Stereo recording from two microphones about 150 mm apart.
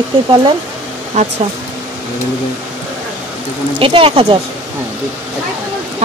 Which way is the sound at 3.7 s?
35° right (ahead or behind).